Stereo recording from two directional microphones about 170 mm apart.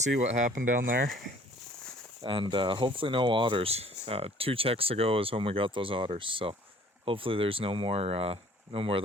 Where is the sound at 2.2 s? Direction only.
30° right (ahead or behind).